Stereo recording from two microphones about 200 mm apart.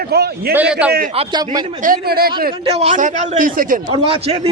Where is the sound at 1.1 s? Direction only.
20° right (ahead or behind).